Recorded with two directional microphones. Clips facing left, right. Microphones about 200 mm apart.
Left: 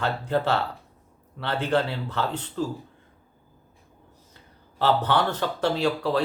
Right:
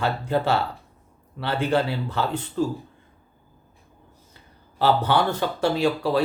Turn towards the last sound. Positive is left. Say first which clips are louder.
# right 2 dB
turn(degrees=-10)  # may be behind; listen again after turning